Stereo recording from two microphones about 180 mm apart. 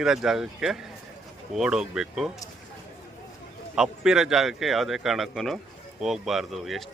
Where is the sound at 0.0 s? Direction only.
Centre (ahead or behind).